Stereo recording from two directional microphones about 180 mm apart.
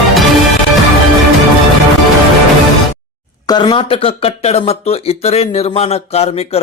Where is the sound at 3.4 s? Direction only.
25° left (ahead or behind).